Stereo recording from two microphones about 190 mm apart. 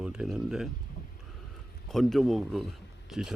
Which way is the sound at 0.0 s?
5° right (ahead or behind).